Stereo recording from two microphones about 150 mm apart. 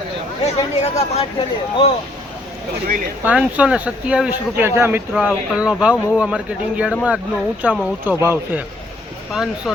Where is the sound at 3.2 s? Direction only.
10° right (ahead or behind).